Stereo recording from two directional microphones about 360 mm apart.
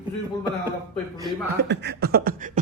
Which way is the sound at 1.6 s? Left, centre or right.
Right.